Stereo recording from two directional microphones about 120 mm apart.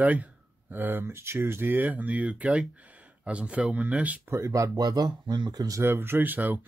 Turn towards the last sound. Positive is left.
turn(degrees=-15)  # may be behind; listen again after turning